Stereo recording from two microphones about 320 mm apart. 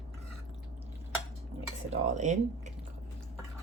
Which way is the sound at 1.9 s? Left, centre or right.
Right.